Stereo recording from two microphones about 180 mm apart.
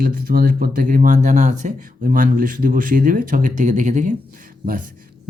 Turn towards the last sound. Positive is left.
turn(degrees=-50)  # may be behind; listen again after turning